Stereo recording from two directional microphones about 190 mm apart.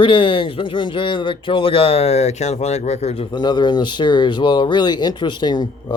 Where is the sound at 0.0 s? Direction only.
25° left (ahead or behind).